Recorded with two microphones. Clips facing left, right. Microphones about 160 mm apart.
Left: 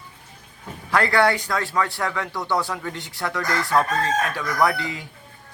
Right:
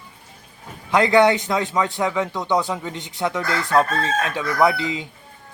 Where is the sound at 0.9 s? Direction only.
20° right (ahead or behind).